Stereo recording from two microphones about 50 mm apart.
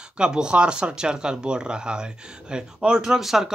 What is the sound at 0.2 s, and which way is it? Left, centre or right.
Speech, centre.